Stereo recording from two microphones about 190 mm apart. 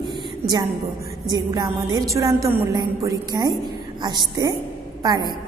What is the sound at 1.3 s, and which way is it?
A woman's voice, 20° right (ahead or behind).